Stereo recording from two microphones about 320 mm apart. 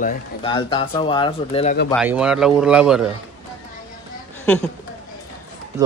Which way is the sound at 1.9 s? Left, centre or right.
Centre.